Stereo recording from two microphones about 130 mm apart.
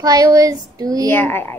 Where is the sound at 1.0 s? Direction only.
20° left (ahead or behind).